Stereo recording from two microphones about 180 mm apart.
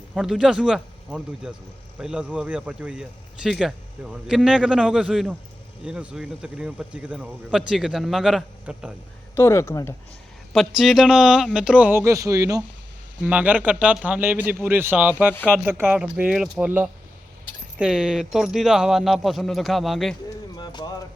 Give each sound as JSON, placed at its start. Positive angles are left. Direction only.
{"t": 0.1, "sound": "a man's voice", "side_deg": 0}
{"t": 9.3, "sound": "speech", "side_deg": 15}
{"t": 10.5, "sound": "a man's voice", "side_deg": 0}
{"t": 13.2, "sound": "a man's voice", "side_deg": -10}
{"t": 20.6, "sound": "music", "side_deg": 25}